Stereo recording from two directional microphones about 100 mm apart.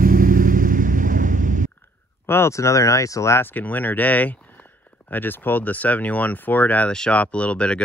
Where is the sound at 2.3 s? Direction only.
30° left (ahead or behind).